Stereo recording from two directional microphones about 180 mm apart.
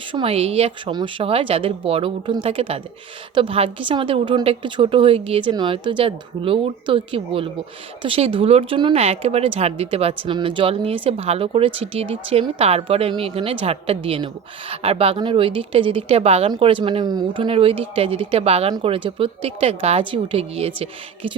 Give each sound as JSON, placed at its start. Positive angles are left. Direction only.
{"t": 0.1, "sound": "a woman's voice", "side_deg": -30}